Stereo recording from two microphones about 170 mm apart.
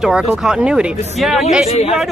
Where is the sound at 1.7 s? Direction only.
40° left (ahead or behind).